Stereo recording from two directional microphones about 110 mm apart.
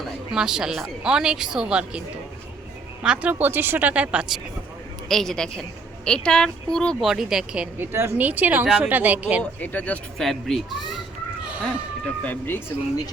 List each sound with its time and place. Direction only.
0.3 s a woman's voice: 5° right (ahead or behind)
3.0 s speech: 10° right (ahead or behind)
5.0 s a woman's voice: 5° left (ahead or behind)
7.8 s speech: 20° right (ahead or behind)
9.4 s speech: 15° left (ahead or behind)
10.2 s a woman's voice: centre (ahead or behind)
12.0 s speech: 15° left (ahead or behind)